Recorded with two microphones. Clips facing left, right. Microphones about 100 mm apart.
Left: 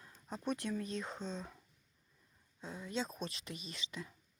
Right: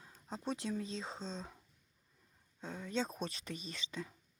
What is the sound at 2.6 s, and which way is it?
Speech, 50° right (ahead or behind).